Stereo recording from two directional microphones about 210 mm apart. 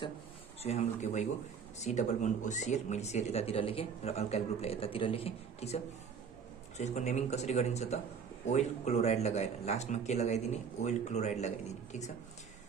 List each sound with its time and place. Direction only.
0.6 s speech: 30° left (ahead or behind)
6.8 s speech: 35° left (ahead or behind)